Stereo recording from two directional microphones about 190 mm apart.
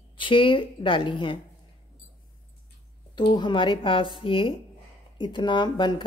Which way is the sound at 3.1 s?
25° left (ahead or behind).